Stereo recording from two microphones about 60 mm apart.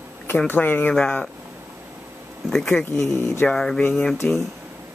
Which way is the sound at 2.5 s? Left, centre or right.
Centre.